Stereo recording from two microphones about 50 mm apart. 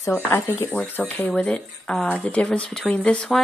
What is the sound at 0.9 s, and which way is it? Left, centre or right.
Speech, left.